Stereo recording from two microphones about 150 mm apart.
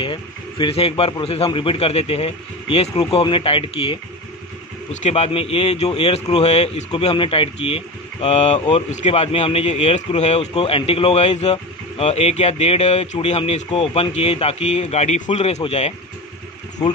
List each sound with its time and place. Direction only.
0.0 s speech: 35° left (ahead or behind)
5.0 s speech: 45° left (ahead or behind)
6.9 s speech: 35° left (ahead or behind)